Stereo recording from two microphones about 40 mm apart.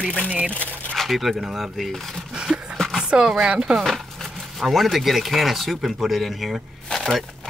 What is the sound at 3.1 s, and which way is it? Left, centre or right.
Speech, right.